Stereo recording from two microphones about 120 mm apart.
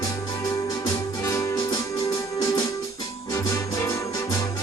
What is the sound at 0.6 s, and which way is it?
Music, 25° left (ahead or behind).